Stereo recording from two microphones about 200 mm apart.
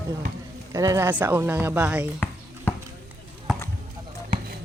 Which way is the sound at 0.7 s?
15° right (ahead or behind).